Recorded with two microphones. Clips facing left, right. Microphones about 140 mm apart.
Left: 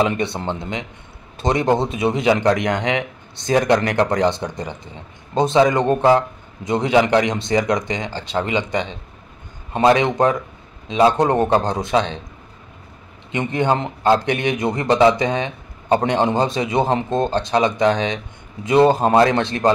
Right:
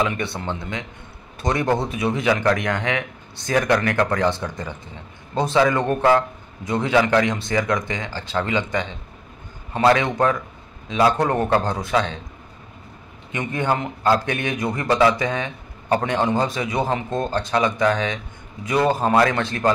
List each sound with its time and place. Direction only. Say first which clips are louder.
0.0 s a man's voice: left 4 dB; 25° left (ahead or behind)
13.3 s a man's voice: left 4 dB; 25° left (ahead or behind)